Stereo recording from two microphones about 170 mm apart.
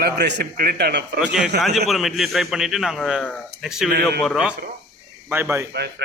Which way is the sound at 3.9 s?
70° right (ahead or behind).